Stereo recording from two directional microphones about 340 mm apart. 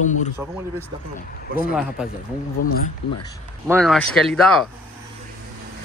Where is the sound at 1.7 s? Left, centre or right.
Centre.